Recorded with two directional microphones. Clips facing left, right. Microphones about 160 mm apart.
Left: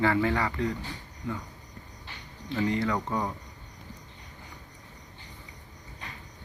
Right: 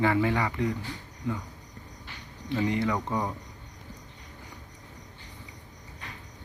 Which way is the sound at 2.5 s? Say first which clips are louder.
Even; 20° right (ahead or behind).